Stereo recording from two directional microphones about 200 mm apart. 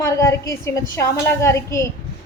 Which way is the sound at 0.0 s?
15° left (ahead or behind).